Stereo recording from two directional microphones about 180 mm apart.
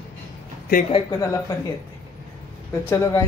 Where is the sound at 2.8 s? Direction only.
20° left (ahead or behind).